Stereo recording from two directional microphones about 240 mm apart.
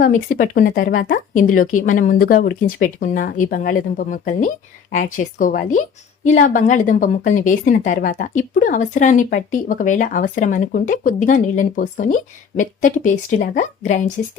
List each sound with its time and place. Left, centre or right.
0.0 s a woman's voice: left